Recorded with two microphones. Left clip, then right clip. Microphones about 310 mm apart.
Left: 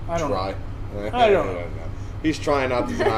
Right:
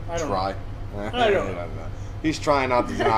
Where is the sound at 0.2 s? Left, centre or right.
Right.